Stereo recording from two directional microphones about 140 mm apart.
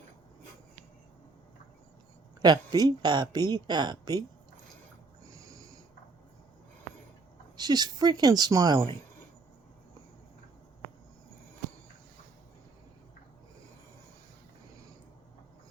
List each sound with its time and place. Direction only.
2.4 s speech: 30° right (ahead or behind)
5.4 s owl: 25° right (ahead or behind)
7.5 s speech: 30° right (ahead or behind)